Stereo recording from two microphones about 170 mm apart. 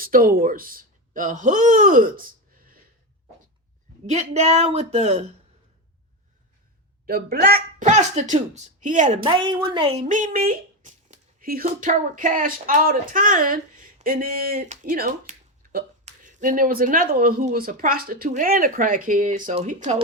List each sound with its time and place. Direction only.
0.0 s speech: 55° right (ahead or behind)
4.0 s a woman's voice: 40° right (ahead or behind)
7.0 s speech: 60° right (ahead or behind)
7.9 s speech: 45° right (ahead or behind)
9.2 s a woman's voice: 30° right (ahead or behind)
10.1 s a sound: 50° right (ahead or behind)
11.6 s speech: 50° right (ahead or behind)